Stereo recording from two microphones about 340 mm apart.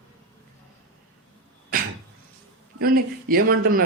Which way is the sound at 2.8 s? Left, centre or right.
Right.